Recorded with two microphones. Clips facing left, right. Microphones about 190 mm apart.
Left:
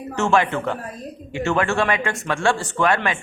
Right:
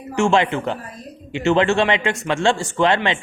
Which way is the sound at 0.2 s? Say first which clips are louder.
Right 2 dB; 15° right (ahead or behind).